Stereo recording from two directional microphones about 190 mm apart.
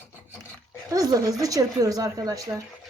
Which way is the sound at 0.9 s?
20° right (ahead or behind).